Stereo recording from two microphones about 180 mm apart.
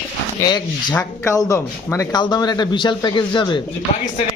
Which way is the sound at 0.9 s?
15° left (ahead or behind).